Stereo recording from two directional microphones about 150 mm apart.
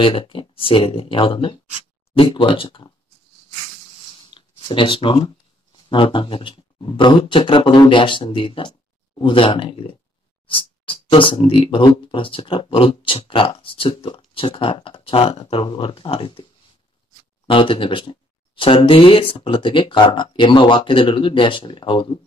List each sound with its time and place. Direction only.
0.0 s speech: 35° left (ahead or behind)
4.1 s a sound: 30° left (ahead or behind)
5.9 s speech: 35° left (ahead or behind)